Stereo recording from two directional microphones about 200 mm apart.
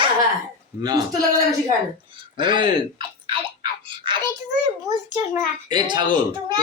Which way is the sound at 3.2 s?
25° right (ahead or behind).